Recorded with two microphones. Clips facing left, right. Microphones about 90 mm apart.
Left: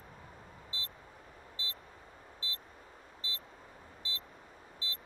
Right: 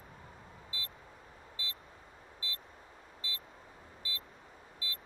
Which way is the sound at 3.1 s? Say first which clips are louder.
Even; 30° left (ahead or behind).